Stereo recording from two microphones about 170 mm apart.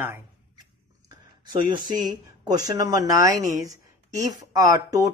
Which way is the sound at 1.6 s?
25° right (ahead or behind).